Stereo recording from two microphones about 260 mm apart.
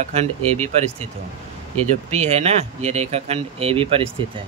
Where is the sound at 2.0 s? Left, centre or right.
Right.